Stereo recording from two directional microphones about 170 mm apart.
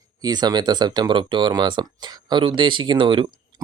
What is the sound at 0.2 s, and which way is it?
Speech, 25° right (ahead or behind).